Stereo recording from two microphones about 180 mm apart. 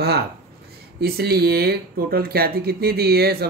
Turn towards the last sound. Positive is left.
turn(degrees=-60)  # may be behind; listen again after turning